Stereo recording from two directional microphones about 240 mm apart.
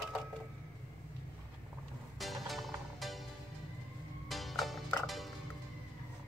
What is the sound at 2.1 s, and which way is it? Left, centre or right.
Music, centre.